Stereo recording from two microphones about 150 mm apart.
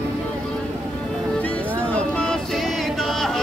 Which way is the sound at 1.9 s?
5° left (ahead or behind).